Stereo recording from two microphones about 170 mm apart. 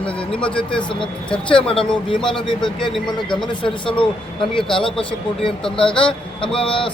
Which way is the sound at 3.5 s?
30° left (ahead or behind).